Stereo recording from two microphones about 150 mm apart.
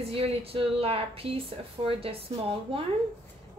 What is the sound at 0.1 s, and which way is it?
A woman's voice, 40° right (ahead or behind).